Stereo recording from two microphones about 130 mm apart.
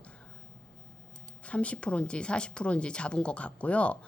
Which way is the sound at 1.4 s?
10° left (ahead or behind).